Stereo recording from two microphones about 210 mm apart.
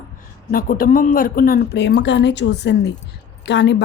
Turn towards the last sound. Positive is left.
turn(degrees=55)  # may be behind; listen again after turning